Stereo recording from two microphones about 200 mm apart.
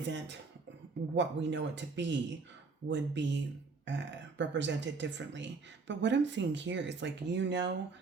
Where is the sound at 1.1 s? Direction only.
60° right (ahead or behind).